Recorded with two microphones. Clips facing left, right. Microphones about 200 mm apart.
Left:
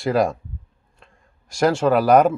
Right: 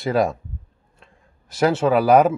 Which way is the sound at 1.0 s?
Centre (ahead or behind).